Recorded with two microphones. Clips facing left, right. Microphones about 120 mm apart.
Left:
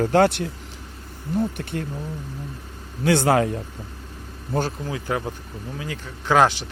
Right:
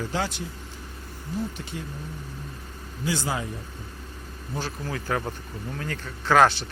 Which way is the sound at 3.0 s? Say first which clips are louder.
Left 10 dB; 65° left (ahead or behind).